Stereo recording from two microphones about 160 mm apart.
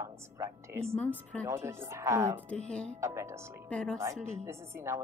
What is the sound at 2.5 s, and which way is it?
Speech, 5° left (ahead or behind).